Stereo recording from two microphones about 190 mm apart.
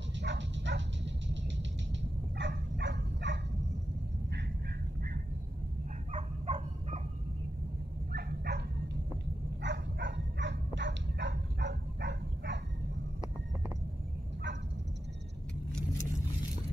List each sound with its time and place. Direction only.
0.2 s dog: 70° right (ahead or behind)
6.1 s dog: 30° right (ahead or behind)
8.1 s dog: 60° right (ahead or behind)